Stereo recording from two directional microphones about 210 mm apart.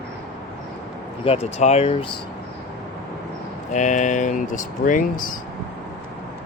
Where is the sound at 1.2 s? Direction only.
30° left (ahead or behind).